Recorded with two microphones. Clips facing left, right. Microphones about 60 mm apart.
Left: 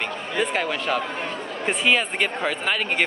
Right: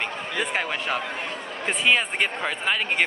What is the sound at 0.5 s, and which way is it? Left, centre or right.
A man's voice, centre.